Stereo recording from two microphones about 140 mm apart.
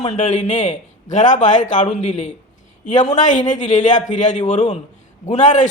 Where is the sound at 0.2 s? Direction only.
60° left (ahead or behind).